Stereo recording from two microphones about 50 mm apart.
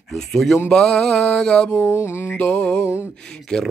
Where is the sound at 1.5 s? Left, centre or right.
Centre.